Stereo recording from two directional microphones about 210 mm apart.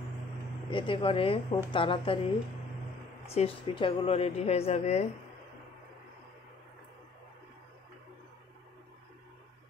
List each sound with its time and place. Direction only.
0.7 s speech: 25° left (ahead or behind)
3.3 s speech: 30° left (ahead or behind)